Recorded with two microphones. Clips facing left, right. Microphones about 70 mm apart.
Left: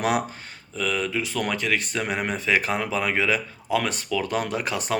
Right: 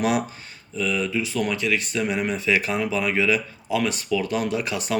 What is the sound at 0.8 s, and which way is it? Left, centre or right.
Speech, left.